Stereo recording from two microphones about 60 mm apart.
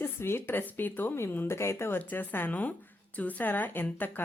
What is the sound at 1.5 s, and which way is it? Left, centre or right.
Speech, left.